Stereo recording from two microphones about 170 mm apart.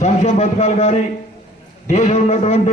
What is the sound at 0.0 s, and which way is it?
A man's voice, 40° left (ahead or behind).